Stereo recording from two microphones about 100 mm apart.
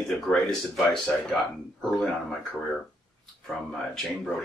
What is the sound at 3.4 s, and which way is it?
Speech, 5° left (ahead or behind).